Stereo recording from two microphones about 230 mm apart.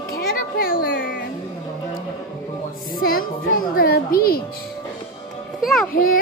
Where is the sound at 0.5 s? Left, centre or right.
Left.